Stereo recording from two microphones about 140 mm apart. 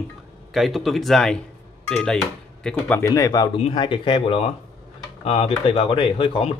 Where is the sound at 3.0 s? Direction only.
25° left (ahead or behind).